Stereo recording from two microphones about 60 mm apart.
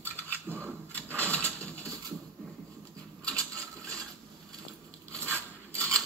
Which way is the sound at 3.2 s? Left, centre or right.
Centre.